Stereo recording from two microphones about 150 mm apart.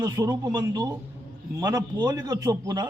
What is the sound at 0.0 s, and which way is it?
A man's voice, 25° right (ahead or behind).